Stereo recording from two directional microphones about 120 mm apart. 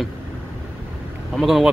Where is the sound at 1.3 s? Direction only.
Centre (ahead or behind).